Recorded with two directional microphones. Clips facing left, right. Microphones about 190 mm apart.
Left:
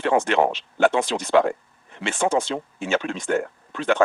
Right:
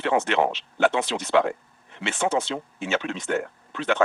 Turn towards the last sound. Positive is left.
turn(degrees=45)  # may be behind; listen again after turning